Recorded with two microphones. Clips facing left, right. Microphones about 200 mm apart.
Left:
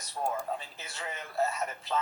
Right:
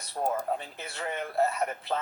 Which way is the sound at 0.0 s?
60° right (ahead or behind).